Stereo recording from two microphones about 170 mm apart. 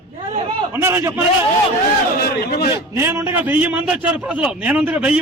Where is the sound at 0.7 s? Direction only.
15° right (ahead or behind).